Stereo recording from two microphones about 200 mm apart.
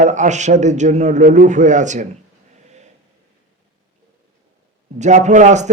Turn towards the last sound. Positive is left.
turn(degrees=-35)  # may be behind; listen again after turning